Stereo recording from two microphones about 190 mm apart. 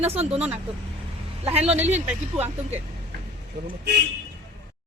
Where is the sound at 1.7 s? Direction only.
10° right (ahead or behind).